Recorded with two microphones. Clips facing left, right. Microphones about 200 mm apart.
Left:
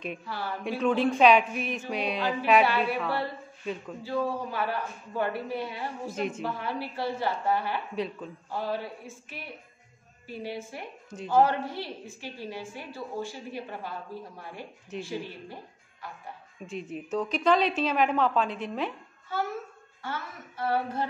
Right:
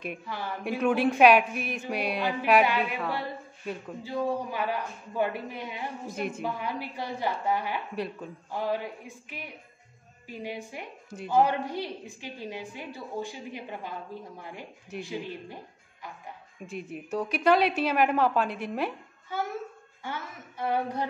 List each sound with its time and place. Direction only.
0.3 s a woman's voice: 10° right (ahead or behind)
16.6 s a woman's voice: 5° right (ahead or behind)
20.0 s a woman's voice: 15° right (ahead or behind)